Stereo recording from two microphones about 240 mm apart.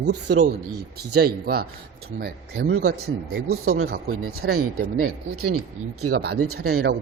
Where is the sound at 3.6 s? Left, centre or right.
Right.